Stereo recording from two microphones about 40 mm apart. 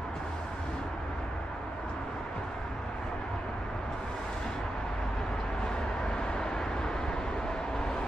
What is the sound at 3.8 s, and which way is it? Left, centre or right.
Vehicle, centre.